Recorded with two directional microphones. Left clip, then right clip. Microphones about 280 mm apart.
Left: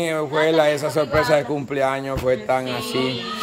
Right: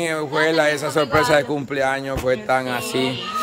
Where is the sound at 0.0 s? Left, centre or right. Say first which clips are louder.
Even; centre.